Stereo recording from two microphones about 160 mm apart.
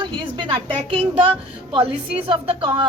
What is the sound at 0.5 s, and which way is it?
A woman's voice, 35° right (ahead or behind).